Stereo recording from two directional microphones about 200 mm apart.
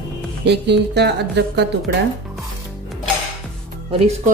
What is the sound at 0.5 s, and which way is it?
Speech, 60° right (ahead or behind).